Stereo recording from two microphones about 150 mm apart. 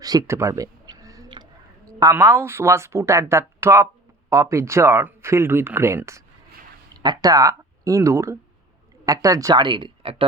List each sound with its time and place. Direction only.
0.0 s speech: 25° right (ahead or behind)